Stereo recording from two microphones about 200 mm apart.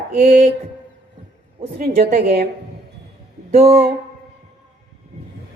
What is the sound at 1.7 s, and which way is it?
Speech, 45° right (ahead or behind).